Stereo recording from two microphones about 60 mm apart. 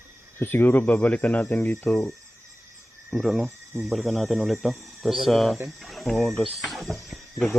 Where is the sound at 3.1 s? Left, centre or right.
Centre.